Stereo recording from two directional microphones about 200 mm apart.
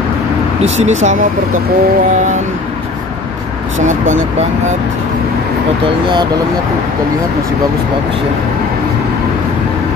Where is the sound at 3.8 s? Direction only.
40° right (ahead or behind).